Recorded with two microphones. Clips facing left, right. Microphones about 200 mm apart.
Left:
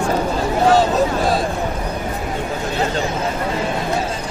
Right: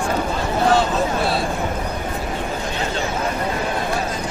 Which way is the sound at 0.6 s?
40° left (ahead or behind).